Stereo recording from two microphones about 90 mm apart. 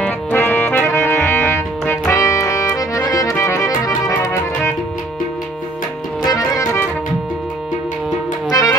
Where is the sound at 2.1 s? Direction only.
35° left (ahead or behind).